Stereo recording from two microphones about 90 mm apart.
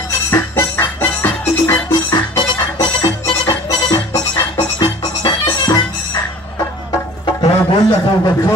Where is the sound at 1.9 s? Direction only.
60° left (ahead or behind).